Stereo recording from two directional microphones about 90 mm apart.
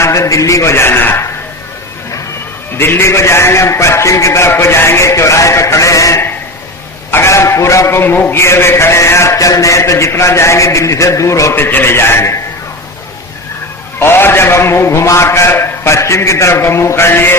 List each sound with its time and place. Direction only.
0.0 s a man's voice: 35° left (ahead or behind)
2.7 s a man's voice: 25° left (ahead or behind)
14.0 s a man's voice: 25° left (ahead or behind)